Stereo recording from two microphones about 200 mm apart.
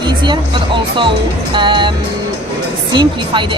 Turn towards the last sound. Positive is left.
turn(degrees=-25)  # may be behind; listen again after turning